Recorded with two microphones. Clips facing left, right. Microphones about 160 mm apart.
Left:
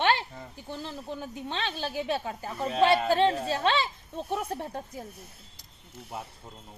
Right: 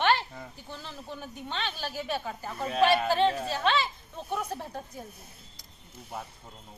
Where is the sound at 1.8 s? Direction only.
25° left (ahead or behind).